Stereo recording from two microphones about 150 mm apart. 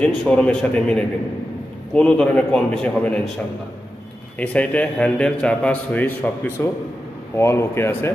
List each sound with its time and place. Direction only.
0.0 s a man's voice: 5° left (ahead or behind)
4.4 s a man's voice: 10° left (ahead or behind)